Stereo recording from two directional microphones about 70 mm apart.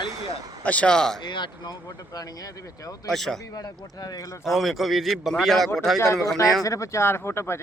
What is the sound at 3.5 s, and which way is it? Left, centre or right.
Speech, left.